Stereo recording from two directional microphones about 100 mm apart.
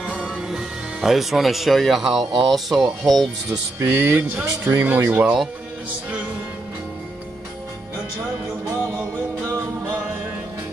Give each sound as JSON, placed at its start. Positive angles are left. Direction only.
{"t": 0.0, "sound": "music", "side_deg": -10}
{"t": 2.4, "sound": "speech", "side_deg": 0}
{"t": 3.8, "sound": "speech", "side_deg": -25}